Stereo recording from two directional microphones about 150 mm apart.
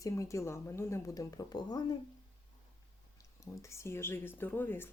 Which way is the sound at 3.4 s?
20° left (ahead or behind).